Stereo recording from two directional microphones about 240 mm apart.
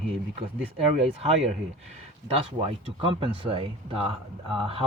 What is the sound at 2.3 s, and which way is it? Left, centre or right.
Speech, right.